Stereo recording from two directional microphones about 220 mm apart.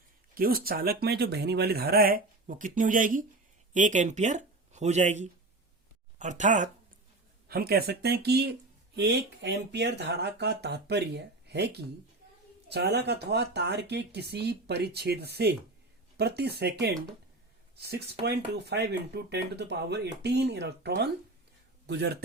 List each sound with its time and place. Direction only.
0.3 s speech: 40° right (ahead or behind)
7.4 s speech: 45° right (ahead or behind)